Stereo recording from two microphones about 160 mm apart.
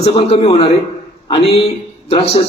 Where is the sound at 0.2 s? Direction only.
35° left (ahead or behind).